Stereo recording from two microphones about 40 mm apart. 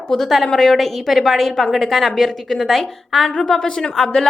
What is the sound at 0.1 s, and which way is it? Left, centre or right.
A woman's voice, centre.